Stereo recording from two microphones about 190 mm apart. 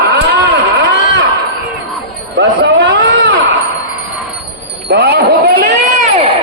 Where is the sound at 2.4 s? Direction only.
70° right (ahead or behind).